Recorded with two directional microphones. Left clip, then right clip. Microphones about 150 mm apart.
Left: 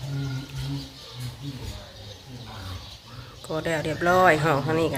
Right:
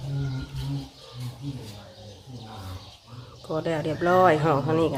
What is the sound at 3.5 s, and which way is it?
Speech, 10° right (ahead or behind).